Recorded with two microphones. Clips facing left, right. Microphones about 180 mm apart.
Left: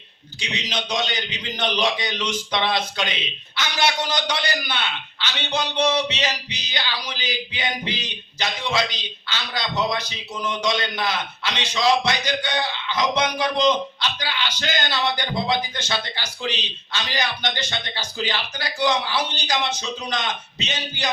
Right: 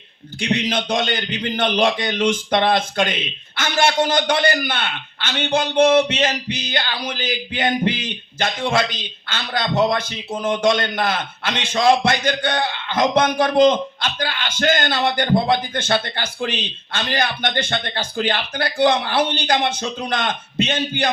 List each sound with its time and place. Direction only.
0.3 s a man's voice: 55° right (ahead or behind)